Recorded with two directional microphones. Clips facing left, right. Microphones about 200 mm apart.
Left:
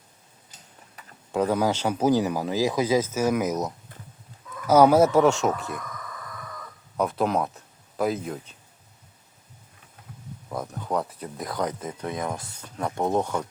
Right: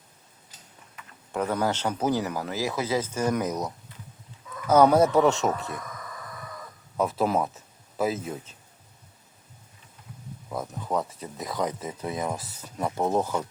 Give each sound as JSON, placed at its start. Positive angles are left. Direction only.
{"t": 1.0, "sound": "a sound", "side_deg": 35}
{"t": 1.3, "sound": "speech", "side_deg": 10}
{"t": 6.9, "sound": "speech", "side_deg": 0}
{"t": 10.5, "sound": "speech", "side_deg": 0}